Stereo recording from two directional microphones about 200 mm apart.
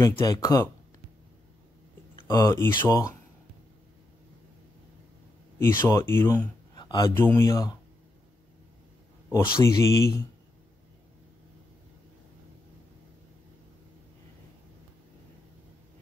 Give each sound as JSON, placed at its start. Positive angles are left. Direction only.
{"t": 0.0, "sound": "speech", "side_deg": 15}
{"t": 2.2, "sound": "speech", "side_deg": 15}
{"t": 5.9, "sound": "speech", "side_deg": 15}
{"t": 9.3, "sound": "speech", "side_deg": 15}